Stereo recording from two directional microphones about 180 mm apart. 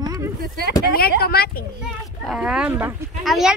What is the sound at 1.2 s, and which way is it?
Speech, 60° left (ahead or behind).